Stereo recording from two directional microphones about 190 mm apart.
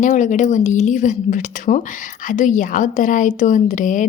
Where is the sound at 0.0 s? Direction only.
40° left (ahead or behind).